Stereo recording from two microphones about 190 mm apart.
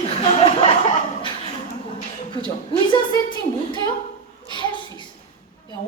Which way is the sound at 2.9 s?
25° left (ahead or behind).